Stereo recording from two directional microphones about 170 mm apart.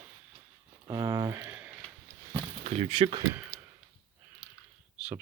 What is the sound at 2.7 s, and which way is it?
Speech, 40° right (ahead or behind).